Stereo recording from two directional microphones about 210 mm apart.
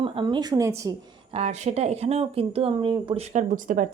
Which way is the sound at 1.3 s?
30° right (ahead or behind).